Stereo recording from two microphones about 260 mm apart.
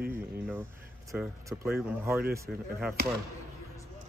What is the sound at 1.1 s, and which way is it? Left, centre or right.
Speech, centre.